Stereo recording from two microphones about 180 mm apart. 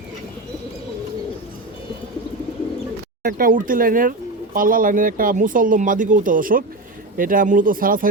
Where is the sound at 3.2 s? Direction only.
50° right (ahead or behind).